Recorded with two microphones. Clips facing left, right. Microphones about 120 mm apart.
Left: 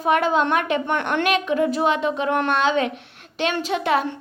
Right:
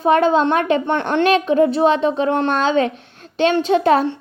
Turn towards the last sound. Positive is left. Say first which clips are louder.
# right 7 dB
turn(degrees=-35)  # may be behind; listen again after turning